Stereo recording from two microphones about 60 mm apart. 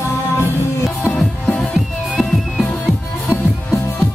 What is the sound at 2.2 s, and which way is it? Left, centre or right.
Music, centre.